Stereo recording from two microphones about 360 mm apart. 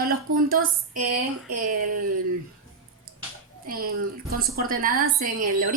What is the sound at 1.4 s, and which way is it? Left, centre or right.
Speech, right.